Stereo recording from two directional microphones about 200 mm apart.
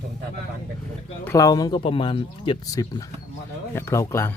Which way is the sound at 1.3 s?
15° left (ahead or behind).